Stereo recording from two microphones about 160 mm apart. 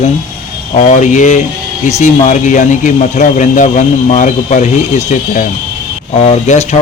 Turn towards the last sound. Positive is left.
turn(degrees=40)  # may be behind; listen again after turning